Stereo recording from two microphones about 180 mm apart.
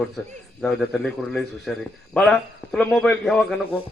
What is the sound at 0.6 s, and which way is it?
A man's voice, 5° left (ahead or behind).